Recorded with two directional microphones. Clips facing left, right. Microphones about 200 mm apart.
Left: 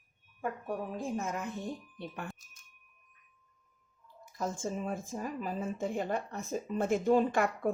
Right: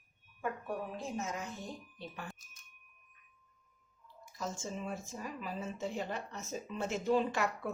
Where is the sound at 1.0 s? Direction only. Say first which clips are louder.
Left 4 dB; 55° left (ahead or behind).